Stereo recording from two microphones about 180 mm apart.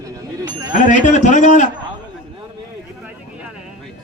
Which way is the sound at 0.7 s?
45° left (ahead or behind).